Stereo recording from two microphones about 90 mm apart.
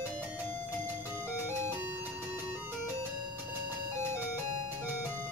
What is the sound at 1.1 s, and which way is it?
Music, 25° right (ahead or behind).